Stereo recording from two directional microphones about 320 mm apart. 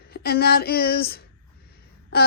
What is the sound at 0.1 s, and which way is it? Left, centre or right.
A woman's voice, left.